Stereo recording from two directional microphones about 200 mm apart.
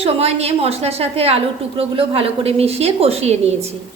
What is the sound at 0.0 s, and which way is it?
A woman's voice, 30° right (ahead or behind).